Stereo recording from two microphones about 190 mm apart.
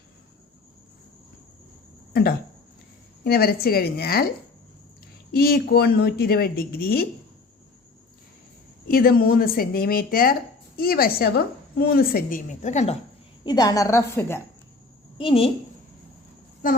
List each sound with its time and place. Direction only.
3.2 s a woman's voice: 55° left (ahead or behind)
5.3 s speech: 55° left (ahead or behind)
8.9 s a woman's voice: 50° left (ahead or behind)
13.4 s a woman's voice: 20° left (ahead or behind)
15.2 s a woman's voice: 30° left (ahead or behind)